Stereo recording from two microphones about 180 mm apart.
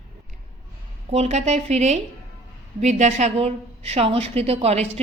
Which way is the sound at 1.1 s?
40° right (ahead or behind).